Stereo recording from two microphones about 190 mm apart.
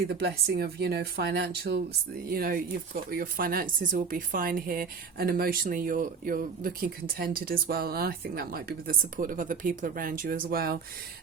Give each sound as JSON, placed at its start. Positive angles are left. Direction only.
{"t": 0.1, "sound": "speech", "side_deg": -55}